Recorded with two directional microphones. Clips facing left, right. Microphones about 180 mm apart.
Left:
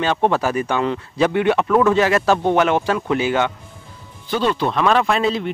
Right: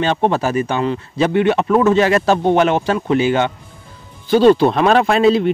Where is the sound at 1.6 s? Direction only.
25° right (ahead or behind).